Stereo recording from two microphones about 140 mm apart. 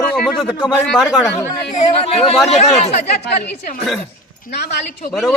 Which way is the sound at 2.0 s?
45° left (ahead or behind).